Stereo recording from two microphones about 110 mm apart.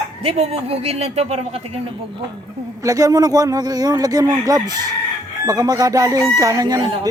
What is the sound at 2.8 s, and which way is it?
A man's voice, 30° right (ahead or behind).